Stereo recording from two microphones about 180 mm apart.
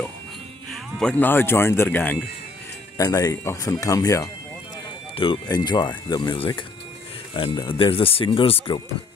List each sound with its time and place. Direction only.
0.7 s speech: 5° left (ahead or behind)
5.1 s speech: 30° left (ahead or behind)